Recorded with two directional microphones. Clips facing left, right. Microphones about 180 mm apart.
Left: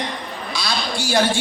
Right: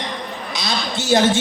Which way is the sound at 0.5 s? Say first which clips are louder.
Even; 20° right (ahead or behind).